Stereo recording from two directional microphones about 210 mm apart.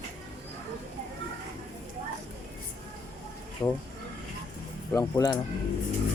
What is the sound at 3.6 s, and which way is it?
Speech, 5° left (ahead or behind).